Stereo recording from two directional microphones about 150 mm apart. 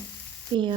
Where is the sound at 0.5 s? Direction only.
30° right (ahead or behind).